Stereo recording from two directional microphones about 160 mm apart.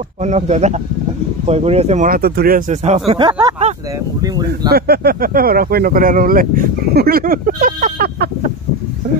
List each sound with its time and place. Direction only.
0.2 s speech: 45° right (ahead or behind)
2.0 s speech: 70° right (ahead or behind)
2.7 s speech: 45° right (ahead or behind)
4.5 s speech: 80° right